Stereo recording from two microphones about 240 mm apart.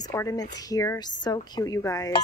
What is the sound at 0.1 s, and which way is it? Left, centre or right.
A woman's voice, centre.